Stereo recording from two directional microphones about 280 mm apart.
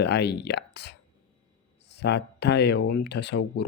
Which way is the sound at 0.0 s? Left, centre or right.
Left.